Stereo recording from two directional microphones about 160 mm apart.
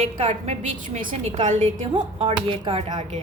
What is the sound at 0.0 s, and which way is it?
A woman's voice, 40° right (ahead or behind).